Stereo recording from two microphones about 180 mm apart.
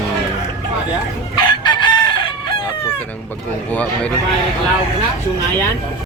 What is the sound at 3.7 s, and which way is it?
Speech, 10° left (ahead or behind).